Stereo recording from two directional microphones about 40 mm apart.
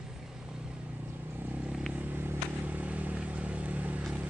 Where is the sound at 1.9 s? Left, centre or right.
Right.